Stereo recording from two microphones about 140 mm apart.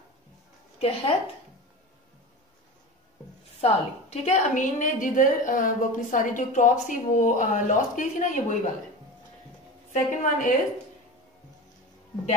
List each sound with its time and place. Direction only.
0.7 s a woman's voice: 45° left (ahead or behind)
3.6 s a woman's voice: 50° left (ahead or behind)
9.9 s a woman's voice: 70° left (ahead or behind)